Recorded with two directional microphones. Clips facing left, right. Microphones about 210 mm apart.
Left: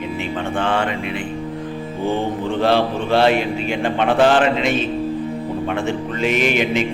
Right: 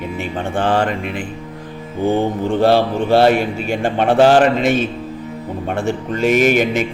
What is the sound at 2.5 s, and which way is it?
Speech, 40° right (ahead or behind).